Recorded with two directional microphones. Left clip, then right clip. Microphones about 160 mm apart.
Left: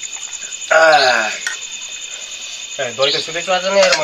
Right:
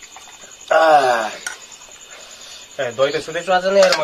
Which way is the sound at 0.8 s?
40° right (ahead or behind).